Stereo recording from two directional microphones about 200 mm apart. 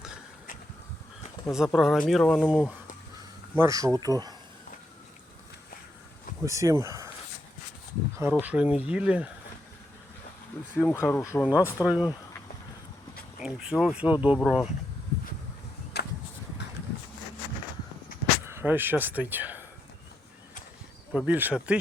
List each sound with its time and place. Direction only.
1.5 s speech: centre (ahead or behind); by 4.1 s 15° right (ahead or behind)
6.4 s speech: 15° right (ahead or behind)
8.1 s speech: 10° right (ahead or behind)
10.8 s speech: 10° left (ahead or behind)
11.4 s speech: 5° right (ahead or behind)
13.4 s speech: 5° right (ahead or behind)
15.9 s a sound: 55° left (ahead or behind)
18.4 s speech: 10° right (ahead or behind)
21.1 s speech: 5° right (ahead or behind)